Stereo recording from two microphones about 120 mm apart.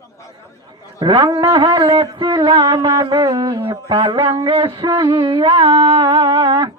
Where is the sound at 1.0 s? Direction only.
35° right (ahead or behind).